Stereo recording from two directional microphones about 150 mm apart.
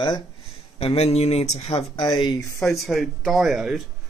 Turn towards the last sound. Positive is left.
turn(degrees=-5)  # may be behind; listen again after turning